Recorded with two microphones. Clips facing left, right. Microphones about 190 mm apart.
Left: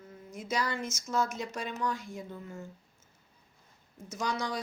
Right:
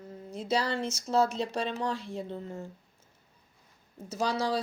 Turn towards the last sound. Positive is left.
turn(degrees=-30)  # may be behind; listen again after turning